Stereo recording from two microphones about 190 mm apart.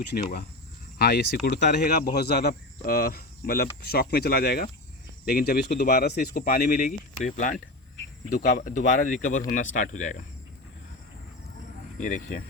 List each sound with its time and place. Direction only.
0.1 s speech: 55° left (ahead or behind)
5.7 s speech: 50° left (ahead or behind)
11.9 s speech: 45° left (ahead or behind)